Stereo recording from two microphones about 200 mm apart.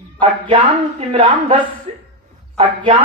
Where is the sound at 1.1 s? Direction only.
25° right (ahead or behind).